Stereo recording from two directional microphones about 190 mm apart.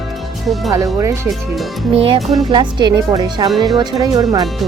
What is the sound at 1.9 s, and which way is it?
Music, 30° right (ahead or behind).